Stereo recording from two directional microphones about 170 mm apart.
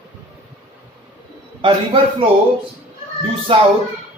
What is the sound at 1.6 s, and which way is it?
Speech, 30° right (ahead or behind).